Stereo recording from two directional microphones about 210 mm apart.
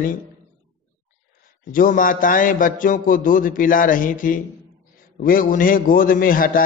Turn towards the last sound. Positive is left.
turn(degrees=40)  # may be behind; listen again after turning